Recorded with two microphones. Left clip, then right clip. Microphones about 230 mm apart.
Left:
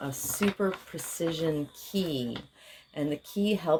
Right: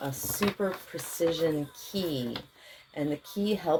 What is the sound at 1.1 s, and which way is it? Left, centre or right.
Speech, left.